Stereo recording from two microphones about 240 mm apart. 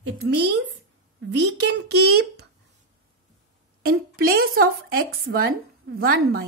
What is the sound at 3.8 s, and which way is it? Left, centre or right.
Speech, right.